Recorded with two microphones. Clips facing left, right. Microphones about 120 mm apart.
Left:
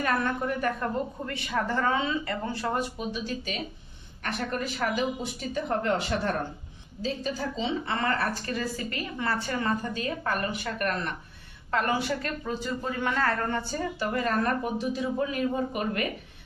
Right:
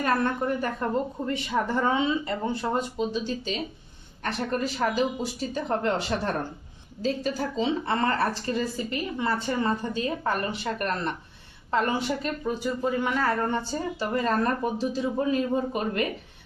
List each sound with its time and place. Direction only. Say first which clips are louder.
0.0 s a woman's voice: right 2 dB; 30° right (ahead or behind)
1.3 s a man's voice: right 4 dB; 20° right (ahead or behind)
7.0 s a woman's voice: right 3 dB; 45° right (ahead or behind)
11.7 s a man's voice: right 1 dB; 20° right (ahead or behind)